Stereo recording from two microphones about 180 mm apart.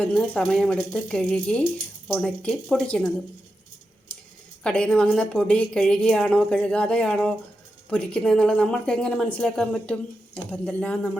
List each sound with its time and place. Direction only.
0.0 s speech: 5° left (ahead or behind)
4.6 s speech: 5° left (ahead or behind)